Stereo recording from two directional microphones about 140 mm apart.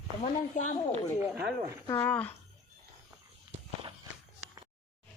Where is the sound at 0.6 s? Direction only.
65° left (ahead or behind).